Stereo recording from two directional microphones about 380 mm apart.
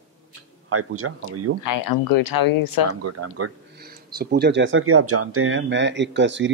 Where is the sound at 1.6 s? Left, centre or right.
Left.